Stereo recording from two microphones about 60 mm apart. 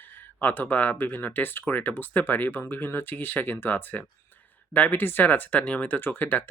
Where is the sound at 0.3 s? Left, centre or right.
Left.